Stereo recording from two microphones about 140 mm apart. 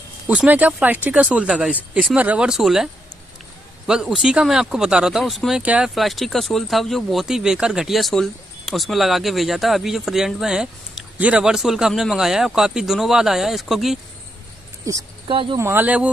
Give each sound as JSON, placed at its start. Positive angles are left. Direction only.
{"t": 0.3, "sound": "speech", "side_deg": -10}
{"t": 15.2, "sound": "speech", "side_deg": -40}
{"t": 15.6, "sound": "speech", "side_deg": -15}